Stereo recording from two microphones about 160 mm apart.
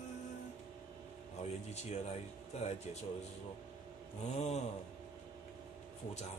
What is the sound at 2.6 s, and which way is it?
Speech, 45° left (ahead or behind).